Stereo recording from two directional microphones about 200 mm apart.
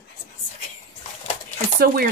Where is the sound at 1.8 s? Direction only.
45° right (ahead or behind).